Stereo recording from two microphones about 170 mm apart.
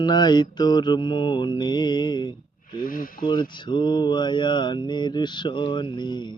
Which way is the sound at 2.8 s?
55° left (ahead or behind).